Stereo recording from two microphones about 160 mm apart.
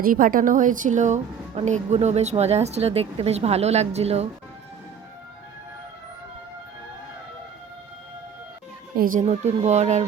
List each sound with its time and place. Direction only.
0.0 s a woman's voice: 60° right (ahead or behind); by 4.3 s 40° right (ahead or behind)
9.0 s a woman's voice: 55° right (ahead or behind)